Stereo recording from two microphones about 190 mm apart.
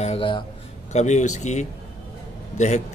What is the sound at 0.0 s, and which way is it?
Speech, 30° left (ahead or behind).